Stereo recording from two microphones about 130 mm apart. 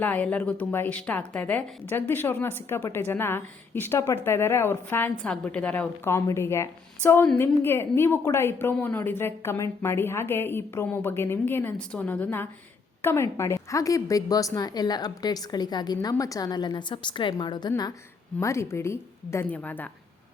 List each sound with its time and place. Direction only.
0.0 s a woman's voice: 10° left (ahead or behind); by 17.9 s 30° left (ahead or behind)
18.3 s a woman's voice: 20° left (ahead or behind)